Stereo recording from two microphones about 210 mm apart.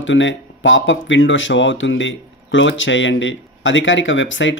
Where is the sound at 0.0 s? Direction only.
60° left (ahead or behind).